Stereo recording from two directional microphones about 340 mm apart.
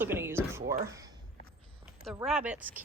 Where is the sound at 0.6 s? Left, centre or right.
Right.